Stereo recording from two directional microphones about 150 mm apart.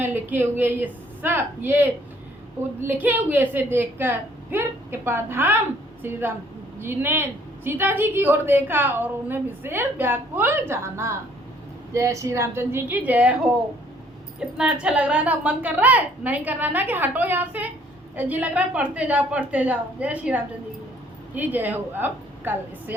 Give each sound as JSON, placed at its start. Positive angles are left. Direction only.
{"t": 0.0, "sound": "a woman's voice", "side_deg": -15}